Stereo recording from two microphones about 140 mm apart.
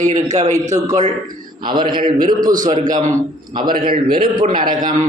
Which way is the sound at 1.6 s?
35° right (ahead or behind).